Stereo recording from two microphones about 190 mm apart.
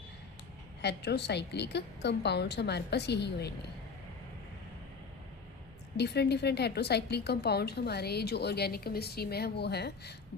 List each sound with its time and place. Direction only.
0.8 s a woman's voice: 60° left (ahead or behind)
6.0 s a woman's voice: 60° left (ahead or behind)